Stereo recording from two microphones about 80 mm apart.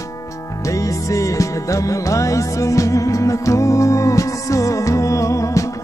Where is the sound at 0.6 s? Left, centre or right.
Left.